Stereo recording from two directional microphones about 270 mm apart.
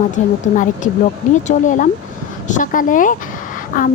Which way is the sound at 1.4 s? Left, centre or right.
Left.